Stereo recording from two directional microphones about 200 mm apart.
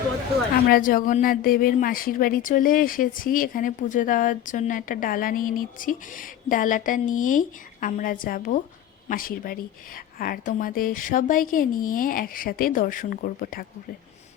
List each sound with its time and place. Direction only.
0.7 s speech: 45° left (ahead or behind)